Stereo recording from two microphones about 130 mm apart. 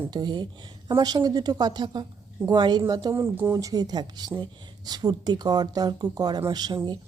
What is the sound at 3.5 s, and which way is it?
Speech, 30° right (ahead or behind).